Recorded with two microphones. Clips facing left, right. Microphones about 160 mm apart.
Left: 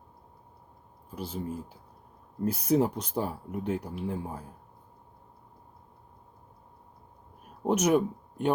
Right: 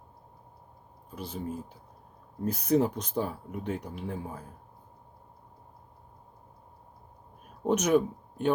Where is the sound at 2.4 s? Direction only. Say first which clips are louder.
Even; 10° left (ahead or behind).